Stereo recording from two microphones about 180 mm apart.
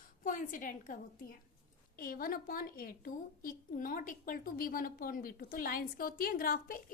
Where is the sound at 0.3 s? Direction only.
45° left (ahead or behind).